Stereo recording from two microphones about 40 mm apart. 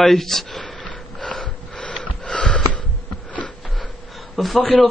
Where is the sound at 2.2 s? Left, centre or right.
Left.